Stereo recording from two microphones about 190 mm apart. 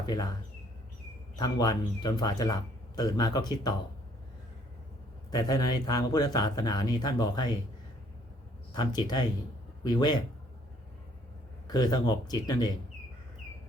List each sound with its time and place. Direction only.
0.0 s speech: 20° left (ahead or behind)
1.4 s speech: 20° left (ahead or behind)
5.3 s speech: 20° left (ahead or behind)
8.7 s speech: 20° left (ahead or behind)
11.7 s speech: 20° left (ahead or behind)